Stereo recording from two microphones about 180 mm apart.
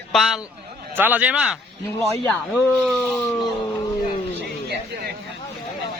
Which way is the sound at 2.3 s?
10° left (ahead or behind).